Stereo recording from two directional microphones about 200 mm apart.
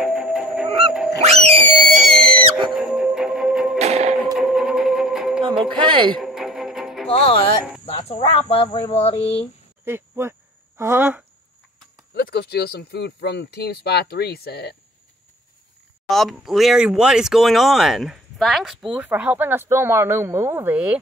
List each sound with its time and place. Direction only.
0.0 s goose: 5° right (ahead or behind)
0.7 s goose: 30° right (ahead or behind)
1.9 s music: 5° left (ahead or behind)
3.7 s music: 30° right (ahead or behind)
4.4 s music: 5° right (ahead or behind)
5.6 s a sound: 25° right (ahead or behind)
6.2 s music: 5° right (ahead or behind)
7.1 s speech: 30° left (ahead or behind)
9.8 s speech: 10° right (ahead or behind)
12.1 s speech: 50° left (ahead or behind)
16.1 s speech: centre (ahead or behind)